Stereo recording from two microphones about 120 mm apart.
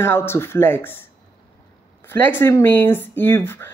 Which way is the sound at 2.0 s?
20° left (ahead or behind).